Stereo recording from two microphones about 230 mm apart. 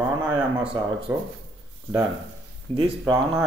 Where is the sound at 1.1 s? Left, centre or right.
Centre.